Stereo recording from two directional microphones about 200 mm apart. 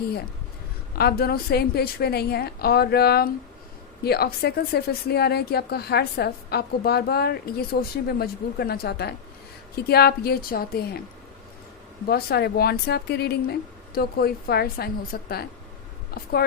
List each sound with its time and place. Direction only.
0.9 s speech: 50° left (ahead or behind)
12.0 s speech: 50° left (ahead or behind)